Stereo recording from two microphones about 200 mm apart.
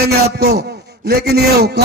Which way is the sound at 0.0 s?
55° right (ahead or behind).